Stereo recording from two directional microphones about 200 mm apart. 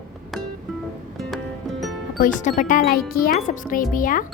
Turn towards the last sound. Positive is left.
turn(degrees=45)  # may be behind; listen again after turning